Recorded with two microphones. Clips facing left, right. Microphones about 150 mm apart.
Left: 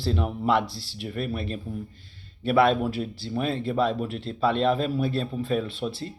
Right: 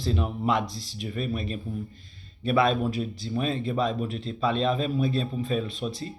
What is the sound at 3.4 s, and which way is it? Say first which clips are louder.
Speech: left 2 dB; 75° left (ahead or behind).